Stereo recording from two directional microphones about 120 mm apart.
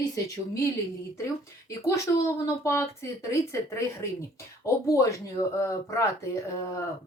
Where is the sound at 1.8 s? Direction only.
25° left (ahead or behind).